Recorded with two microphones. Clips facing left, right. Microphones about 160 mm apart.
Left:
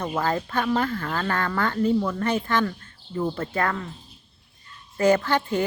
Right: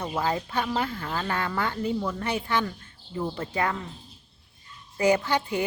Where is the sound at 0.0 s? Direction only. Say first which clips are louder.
Left 2 dB; 15° right (ahead or behind).